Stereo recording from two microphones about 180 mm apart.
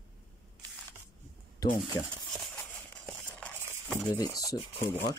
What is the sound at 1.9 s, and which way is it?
Speech, 20° left (ahead or behind).